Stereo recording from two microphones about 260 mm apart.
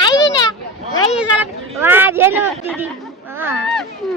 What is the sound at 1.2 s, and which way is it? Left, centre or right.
Speech, centre.